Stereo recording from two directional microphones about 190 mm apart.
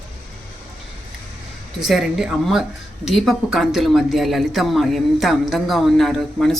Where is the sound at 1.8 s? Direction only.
Centre (ahead or behind).